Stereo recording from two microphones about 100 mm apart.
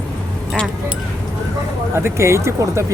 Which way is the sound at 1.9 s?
25° right (ahead or behind).